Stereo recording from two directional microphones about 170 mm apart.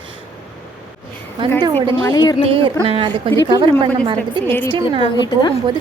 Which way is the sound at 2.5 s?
30° right (ahead or behind).